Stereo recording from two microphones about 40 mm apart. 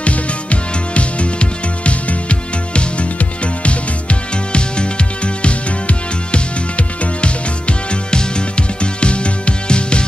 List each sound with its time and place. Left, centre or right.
0.0 s music: left